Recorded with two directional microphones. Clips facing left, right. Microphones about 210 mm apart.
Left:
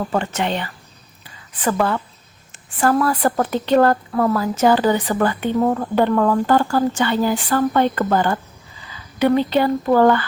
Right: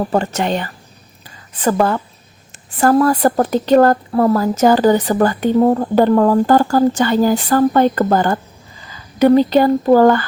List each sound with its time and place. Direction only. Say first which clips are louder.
0.0 s a woman's voice: right 4 dB; 40° right (ahead or behind)